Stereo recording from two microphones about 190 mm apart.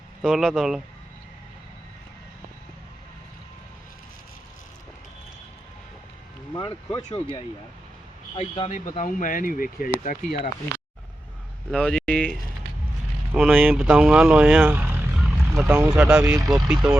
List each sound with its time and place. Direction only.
0.2 s speech: centre (ahead or behind)
6.5 s speech: 20° left (ahead or behind); by 10.3 s 45° left (ahead or behind)
11.7 s speech: centre (ahead or behind)
13.3 s speech: 5° right (ahead or behind)
16.6 s speech: 5° right (ahead or behind)